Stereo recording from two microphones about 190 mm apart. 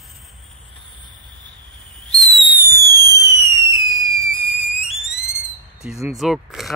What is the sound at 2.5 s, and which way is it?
Fireworks, 20° right (ahead or behind).